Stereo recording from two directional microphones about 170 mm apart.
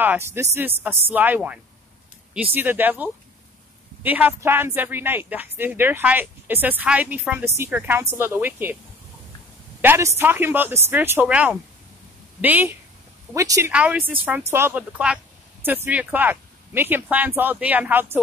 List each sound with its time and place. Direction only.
0.0 s speech: 10° right (ahead or behind)
9.8 s speech: 15° right (ahead or behind)
13.7 s speech: 5° right (ahead or behind)